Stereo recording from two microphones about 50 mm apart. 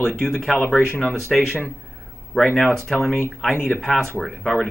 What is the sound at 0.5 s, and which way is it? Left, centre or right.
Speech, left.